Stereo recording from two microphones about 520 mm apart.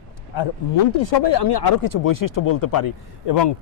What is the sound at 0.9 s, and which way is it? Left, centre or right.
Speech, left.